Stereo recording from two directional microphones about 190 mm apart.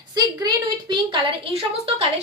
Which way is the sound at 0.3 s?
20° right (ahead or behind).